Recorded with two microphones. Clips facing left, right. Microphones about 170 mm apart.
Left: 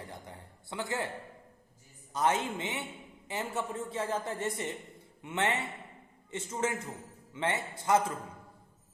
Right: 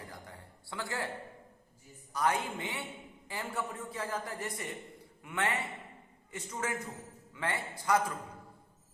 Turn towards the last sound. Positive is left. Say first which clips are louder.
# left 2 dB
turn(degrees=25)  # may be behind; listen again after turning